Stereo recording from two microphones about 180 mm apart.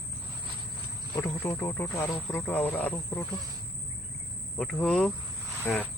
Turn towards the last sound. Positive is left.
turn(degrees=0)  # may be behind; listen again after turning